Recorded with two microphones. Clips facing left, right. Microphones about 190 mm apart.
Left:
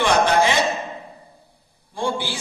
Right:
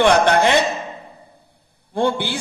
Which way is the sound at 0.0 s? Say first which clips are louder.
Right 3 dB; 60° right (ahead or behind).